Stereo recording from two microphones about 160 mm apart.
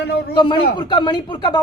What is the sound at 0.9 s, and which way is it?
Speech, 30° left (ahead or behind).